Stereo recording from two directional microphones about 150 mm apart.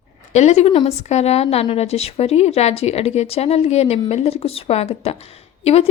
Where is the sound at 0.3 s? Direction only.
45° left (ahead or behind).